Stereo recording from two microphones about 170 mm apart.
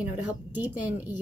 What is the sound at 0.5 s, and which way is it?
Speech, 10° right (ahead or behind).